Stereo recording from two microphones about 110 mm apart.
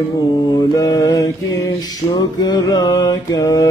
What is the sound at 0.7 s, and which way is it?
Male singing, 30° left (ahead or behind).